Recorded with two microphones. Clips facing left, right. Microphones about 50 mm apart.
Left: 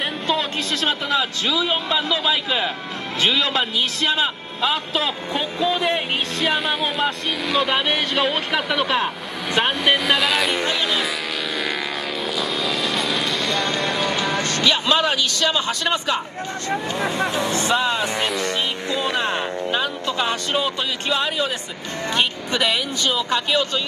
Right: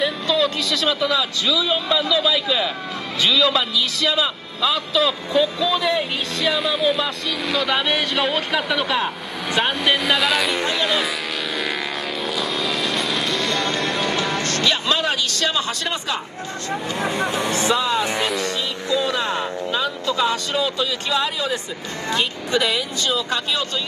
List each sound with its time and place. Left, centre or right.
0.0 s a man's voice: left
6.6 s speech: centre
12.3 s vehicle: centre
15.5 s a man's voice: left
17.3 s speech: right
17.6 s a man's voice: left